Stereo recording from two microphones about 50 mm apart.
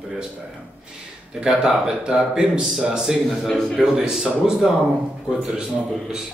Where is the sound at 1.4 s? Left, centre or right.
Centre.